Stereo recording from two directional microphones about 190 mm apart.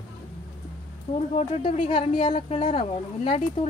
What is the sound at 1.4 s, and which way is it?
Speech, 35° left (ahead or behind).